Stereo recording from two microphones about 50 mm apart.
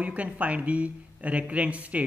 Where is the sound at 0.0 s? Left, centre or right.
Right.